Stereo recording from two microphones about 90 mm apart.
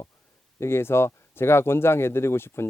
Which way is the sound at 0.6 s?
25° left (ahead or behind).